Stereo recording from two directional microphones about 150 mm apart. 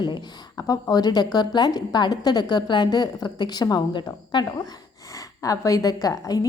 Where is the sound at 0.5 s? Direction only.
25° left (ahead or behind).